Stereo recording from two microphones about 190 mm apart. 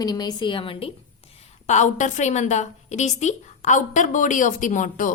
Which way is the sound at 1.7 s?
40° left (ahead or behind).